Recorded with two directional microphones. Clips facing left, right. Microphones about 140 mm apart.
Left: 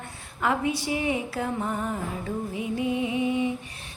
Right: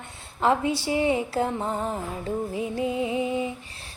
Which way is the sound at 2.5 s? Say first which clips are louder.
Left 2 dB; 35° right (ahead or behind).